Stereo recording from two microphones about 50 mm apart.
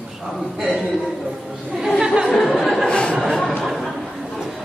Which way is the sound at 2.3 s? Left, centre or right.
Centre.